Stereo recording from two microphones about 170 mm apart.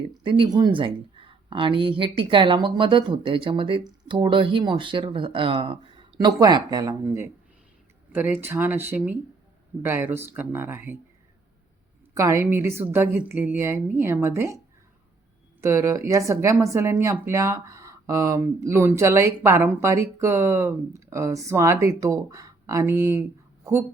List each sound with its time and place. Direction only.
0.2 s speech: 30° right (ahead or behind)
12.1 s speech: 20° right (ahead or behind)
15.6 s speech: 15° right (ahead or behind)